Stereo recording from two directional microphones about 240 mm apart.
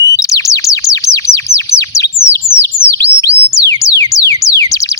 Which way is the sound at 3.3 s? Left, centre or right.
Right.